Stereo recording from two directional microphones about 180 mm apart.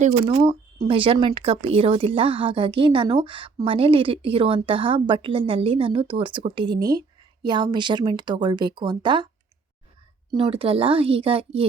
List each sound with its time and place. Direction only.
0.0 s speech: 40° right (ahead or behind); by 9.2 s 25° right (ahead or behind)
10.3 s speech: 30° right (ahead or behind)